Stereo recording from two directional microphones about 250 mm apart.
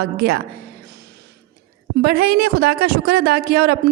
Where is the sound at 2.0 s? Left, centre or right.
Right.